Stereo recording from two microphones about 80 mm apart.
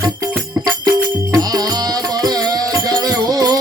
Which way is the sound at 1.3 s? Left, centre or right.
Right.